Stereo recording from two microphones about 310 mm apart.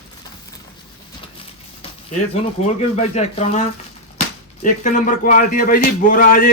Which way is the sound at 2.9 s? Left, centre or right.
Left.